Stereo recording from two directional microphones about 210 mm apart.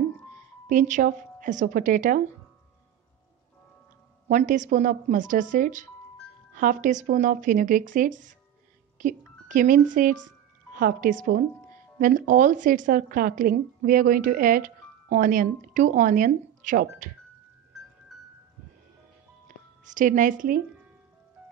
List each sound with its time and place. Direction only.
0.7 s a woman's voice: 35° right (ahead or behind)
4.3 s a woman's voice: 35° right (ahead or behind)
19.4 s music: 35° right (ahead or behind)